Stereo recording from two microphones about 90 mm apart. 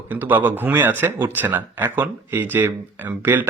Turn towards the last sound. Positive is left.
turn(degrees=-20)  # may be behind; listen again after turning